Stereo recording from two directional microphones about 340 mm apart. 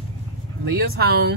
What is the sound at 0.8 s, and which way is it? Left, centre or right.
Speech, right.